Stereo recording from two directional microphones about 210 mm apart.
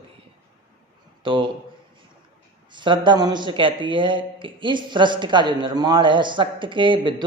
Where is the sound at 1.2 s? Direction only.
25° right (ahead or behind).